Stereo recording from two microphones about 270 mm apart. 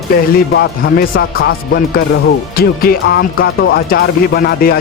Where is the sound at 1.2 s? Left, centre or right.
Left.